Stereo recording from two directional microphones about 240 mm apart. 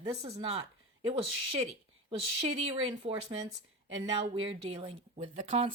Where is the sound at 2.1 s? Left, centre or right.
Right.